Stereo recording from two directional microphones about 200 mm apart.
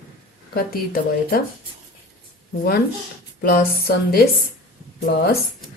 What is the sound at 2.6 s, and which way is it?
A woman's voice, 50° left (ahead or behind).